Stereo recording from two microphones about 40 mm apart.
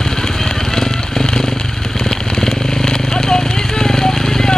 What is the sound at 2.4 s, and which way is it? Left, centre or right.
Vehicle, centre.